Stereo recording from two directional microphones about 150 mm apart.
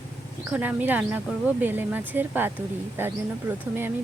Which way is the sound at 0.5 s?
10° right (ahead or behind).